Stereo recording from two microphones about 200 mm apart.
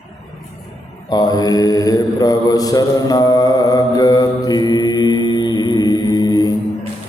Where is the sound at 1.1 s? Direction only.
20° left (ahead or behind).